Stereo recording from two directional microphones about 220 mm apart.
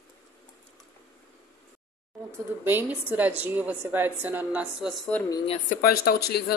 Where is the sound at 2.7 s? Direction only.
10° right (ahead or behind).